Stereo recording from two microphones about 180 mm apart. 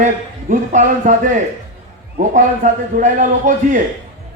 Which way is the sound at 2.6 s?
45° right (ahead or behind).